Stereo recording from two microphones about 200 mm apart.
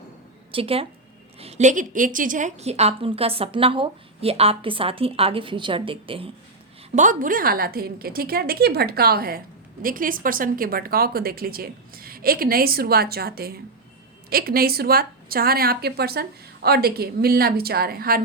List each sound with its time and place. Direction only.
0.5 s a woman's voice: 30° right (ahead or behind)
6.9 s a woman's voice: 40° right (ahead or behind)